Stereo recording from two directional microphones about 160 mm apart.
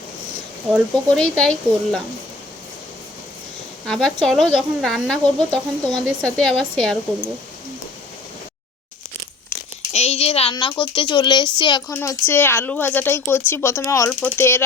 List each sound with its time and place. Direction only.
0.7 s speech: 5° left (ahead or behind)
3.8 s speech: centre (ahead or behind)
9.9 s speech: 40° left (ahead or behind)
11.9 s speech: 15° left (ahead or behind)